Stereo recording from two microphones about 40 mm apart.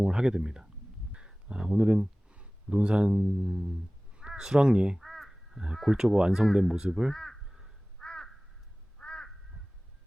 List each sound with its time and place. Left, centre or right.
0.0 s speech: centre
4.9 s crow: centre
5.9 s speech: right
7.1 s speech: centre
7.4 s crow: centre
7.9 s crow: centre